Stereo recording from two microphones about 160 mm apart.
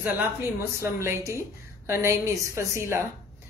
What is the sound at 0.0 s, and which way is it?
Speech, 15° right (ahead or behind).